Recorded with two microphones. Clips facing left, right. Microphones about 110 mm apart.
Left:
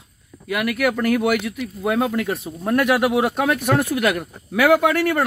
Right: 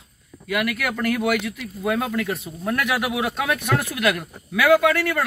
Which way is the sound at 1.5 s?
25° left (ahead or behind).